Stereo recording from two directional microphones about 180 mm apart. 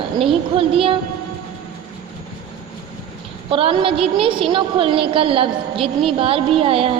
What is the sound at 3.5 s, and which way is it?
A woman's voice, 30° right (ahead or behind).